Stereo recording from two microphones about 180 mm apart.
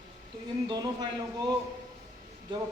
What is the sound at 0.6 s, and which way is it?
Speech, 25° right (ahead or behind).